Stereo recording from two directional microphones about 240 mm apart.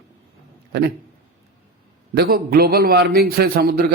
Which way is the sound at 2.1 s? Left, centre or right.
Right.